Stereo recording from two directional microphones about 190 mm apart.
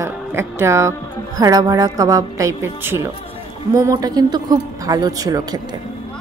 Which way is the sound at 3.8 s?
15° right (ahead or behind).